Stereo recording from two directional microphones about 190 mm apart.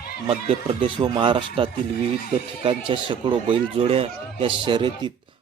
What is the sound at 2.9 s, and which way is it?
Speech, 25° right (ahead or behind).